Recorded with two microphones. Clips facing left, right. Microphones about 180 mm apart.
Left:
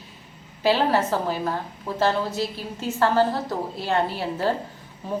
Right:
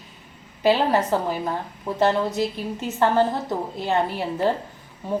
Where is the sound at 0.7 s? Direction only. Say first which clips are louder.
Right 1 dB; 15° right (ahead or behind).